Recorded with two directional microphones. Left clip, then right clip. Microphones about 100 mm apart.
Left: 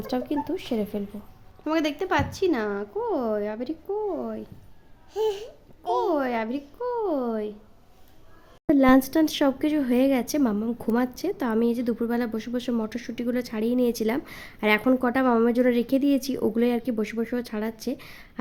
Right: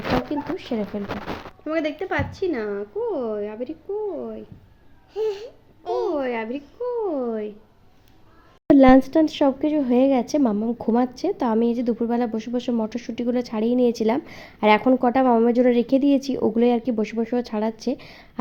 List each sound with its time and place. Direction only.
0.3 s a woman's voice: 5° left (ahead or behind)
1.6 s a woman's voice: 45° left (ahead or behind)
3.1 s a woman's voice: 50° left (ahead or behind)
5.1 s a woman's voice: centre (ahead or behind)
6.1 s speech: 35° left (ahead or behind); by 7.5 s 20° left (ahead or behind)
8.7 s speech: 20° right (ahead or behind)
9.0 s a woman's voice: 5° right (ahead or behind)
10.8 s a woman's voice: 15° right (ahead or behind)
15.0 s a woman's voice: 5° right (ahead or behind); by 18.3 s 20° right (ahead or behind)